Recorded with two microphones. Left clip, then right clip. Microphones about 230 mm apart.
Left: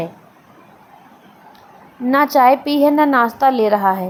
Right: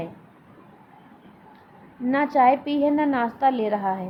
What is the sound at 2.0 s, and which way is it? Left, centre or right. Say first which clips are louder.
A woman's voice: left 7 dB; centre.